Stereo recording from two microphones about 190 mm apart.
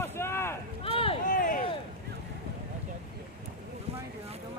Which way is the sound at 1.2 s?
45° left (ahead or behind).